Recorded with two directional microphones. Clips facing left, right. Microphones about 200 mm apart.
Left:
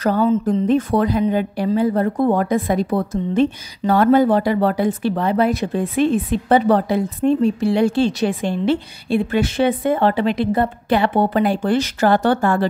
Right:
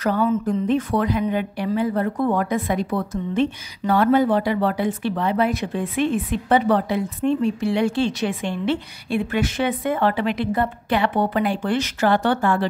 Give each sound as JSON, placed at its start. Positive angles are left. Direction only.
{"t": 0.0, "sound": "a woman's voice", "side_deg": 35}